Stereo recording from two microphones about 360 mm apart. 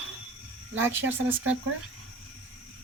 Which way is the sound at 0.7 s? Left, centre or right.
Centre.